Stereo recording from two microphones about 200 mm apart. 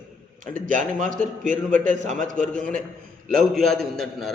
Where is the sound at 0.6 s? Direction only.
40° right (ahead or behind).